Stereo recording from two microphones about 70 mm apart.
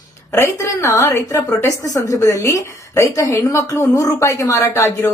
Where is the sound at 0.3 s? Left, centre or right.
Left.